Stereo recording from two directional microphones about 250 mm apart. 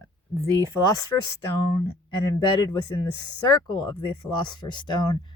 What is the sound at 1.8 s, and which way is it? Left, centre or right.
Speech, centre.